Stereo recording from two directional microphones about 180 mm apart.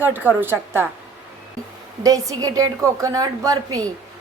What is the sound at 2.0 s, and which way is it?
A woman's voice, 20° right (ahead or behind).